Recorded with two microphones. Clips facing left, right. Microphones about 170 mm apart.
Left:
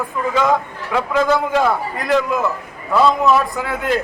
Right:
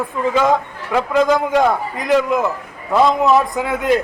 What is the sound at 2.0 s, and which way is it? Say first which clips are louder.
A man's voice: right 3 dB; 20° right (ahead or behind).